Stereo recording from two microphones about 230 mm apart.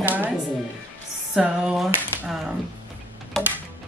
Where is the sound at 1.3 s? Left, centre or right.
Centre.